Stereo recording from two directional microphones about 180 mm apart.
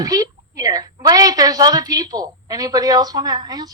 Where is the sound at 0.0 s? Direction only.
20° right (ahead or behind).